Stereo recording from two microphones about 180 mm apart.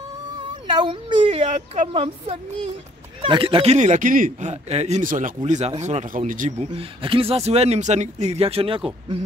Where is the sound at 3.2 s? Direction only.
30° right (ahead or behind); by 6.7 s 45° right (ahead or behind).